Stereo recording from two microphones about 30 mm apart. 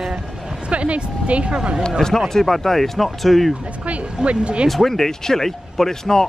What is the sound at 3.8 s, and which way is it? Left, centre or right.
Speech, right.